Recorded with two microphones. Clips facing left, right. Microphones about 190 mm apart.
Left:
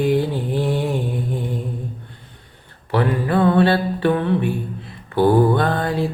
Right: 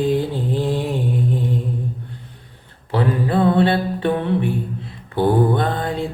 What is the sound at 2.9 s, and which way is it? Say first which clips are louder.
Mantra: even; 25° right (ahead or behind).